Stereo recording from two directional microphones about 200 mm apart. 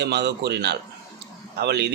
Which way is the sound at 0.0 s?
55° right (ahead or behind).